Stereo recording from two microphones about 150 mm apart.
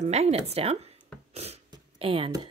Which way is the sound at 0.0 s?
45° right (ahead or behind).